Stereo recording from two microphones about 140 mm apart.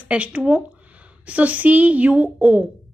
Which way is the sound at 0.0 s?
10° right (ahead or behind).